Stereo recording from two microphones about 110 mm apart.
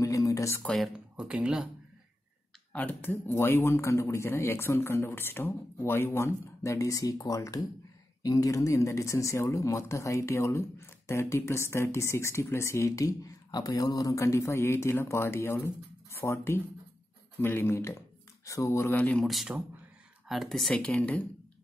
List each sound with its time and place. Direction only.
0.0 s a sound: 30° left (ahead or behind)
0.7 s speech: 5° right (ahead or behind)
2.7 s speech: 15° left (ahead or behind)
18.9 s speech: 15° left (ahead or behind)
19.2 s speech: centre (ahead or behind)